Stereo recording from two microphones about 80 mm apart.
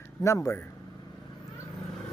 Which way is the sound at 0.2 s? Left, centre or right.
Left.